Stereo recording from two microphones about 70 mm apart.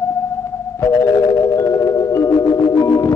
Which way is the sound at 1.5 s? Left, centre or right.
Left.